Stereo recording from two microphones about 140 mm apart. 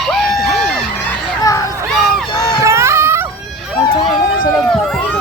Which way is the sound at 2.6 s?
20° right (ahead or behind).